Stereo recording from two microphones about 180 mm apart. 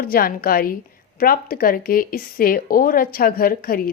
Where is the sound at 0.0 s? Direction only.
55° left (ahead or behind).